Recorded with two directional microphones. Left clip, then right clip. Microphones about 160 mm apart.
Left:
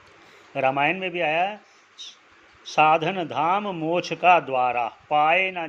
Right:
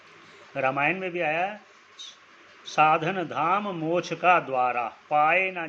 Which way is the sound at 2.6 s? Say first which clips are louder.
Left 3 dB; 35° left (ahead or behind).